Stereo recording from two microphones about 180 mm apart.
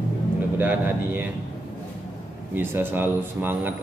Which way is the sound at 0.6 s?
10° right (ahead or behind).